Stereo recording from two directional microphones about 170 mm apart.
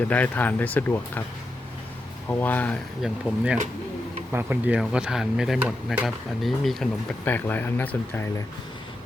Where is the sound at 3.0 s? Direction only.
5° right (ahead or behind).